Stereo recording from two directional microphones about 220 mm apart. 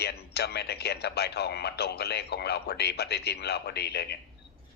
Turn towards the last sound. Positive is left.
turn(degrees=45)  # may be behind; listen again after turning